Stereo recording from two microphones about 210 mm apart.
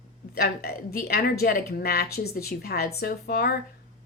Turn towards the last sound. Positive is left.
turn(degrees=45)  # may be behind; listen again after turning